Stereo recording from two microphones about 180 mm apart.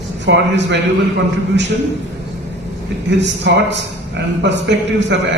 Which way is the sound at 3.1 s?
75° right (ahead or behind).